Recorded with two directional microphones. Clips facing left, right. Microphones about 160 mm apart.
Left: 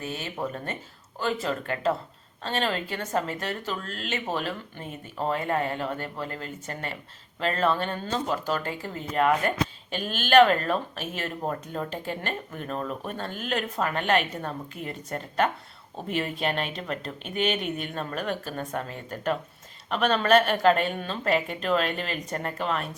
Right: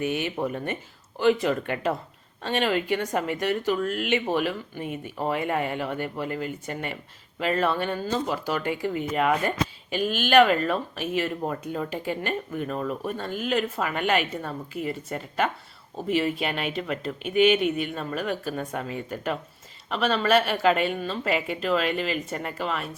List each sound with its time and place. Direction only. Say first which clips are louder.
0.0 s speech: right 5 dB; 15° right (ahead or behind)